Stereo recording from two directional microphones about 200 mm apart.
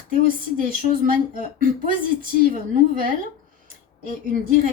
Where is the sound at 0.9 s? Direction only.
45° right (ahead or behind).